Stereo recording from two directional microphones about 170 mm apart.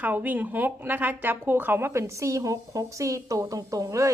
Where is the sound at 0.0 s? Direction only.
10° right (ahead or behind).